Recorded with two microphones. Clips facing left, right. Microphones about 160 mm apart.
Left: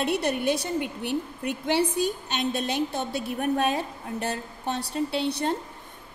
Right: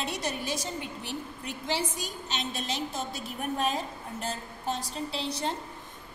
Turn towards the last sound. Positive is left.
turn(degrees=65)  # may be behind; listen again after turning